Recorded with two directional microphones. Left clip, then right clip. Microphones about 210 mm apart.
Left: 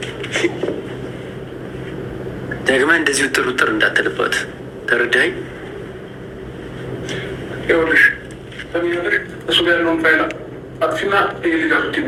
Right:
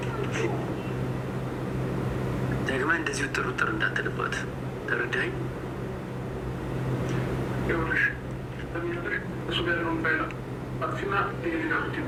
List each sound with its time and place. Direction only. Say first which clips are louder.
2.7 s a man's voice: left 13 dB; 35° left (ahead or behind)
7.7 s a man's voice: left 14 dB; 35° left (ahead or behind)